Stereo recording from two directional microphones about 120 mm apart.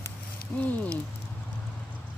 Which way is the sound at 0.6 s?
10° left (ahead or behind).